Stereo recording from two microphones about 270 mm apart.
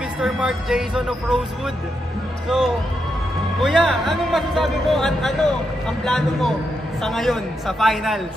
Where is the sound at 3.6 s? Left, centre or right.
Centre.